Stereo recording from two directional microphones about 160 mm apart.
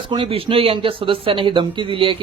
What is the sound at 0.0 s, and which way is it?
Speech, 30° right (ahead or behind).